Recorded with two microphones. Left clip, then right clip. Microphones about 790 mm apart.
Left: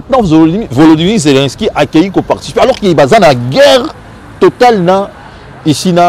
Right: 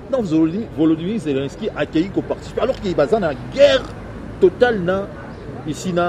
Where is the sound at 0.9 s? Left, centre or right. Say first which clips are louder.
Left 14 dB; left.